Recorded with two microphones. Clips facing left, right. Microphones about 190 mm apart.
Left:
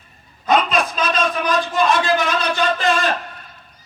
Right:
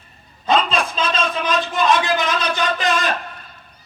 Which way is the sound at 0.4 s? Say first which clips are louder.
Left 1 dB; 30° right (ahead or behind).